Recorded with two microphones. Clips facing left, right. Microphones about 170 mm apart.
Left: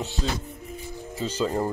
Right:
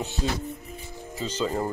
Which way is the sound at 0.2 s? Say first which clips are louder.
Right 1 dB; 10° right (ahead or behind).